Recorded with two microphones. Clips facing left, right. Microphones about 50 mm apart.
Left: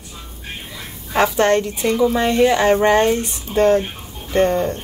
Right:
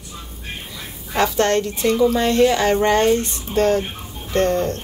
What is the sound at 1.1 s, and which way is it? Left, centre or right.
A woman's voice, centre.